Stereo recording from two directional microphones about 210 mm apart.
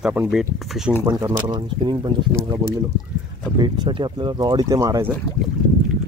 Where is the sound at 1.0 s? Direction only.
15° right (ahead or behind).